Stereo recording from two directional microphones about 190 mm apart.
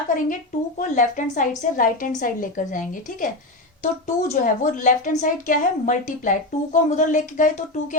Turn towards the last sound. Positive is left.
turn(degrees=40)  # may be behind; listen again after turning